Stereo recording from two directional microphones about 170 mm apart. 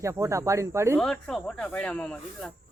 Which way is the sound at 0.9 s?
5° left (ahead or behind).